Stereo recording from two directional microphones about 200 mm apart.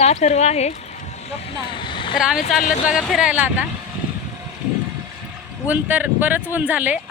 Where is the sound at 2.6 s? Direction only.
40° left (ahead or behind).